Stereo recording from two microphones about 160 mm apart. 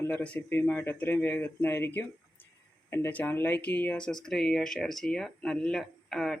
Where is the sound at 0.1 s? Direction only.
10° left (ahead or behind).